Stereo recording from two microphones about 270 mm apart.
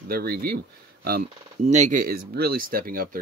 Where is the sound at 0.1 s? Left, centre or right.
Right.